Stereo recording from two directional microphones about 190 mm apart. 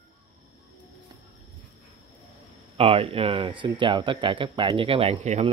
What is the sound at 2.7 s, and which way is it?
Speech, 30° right (ahead or behind).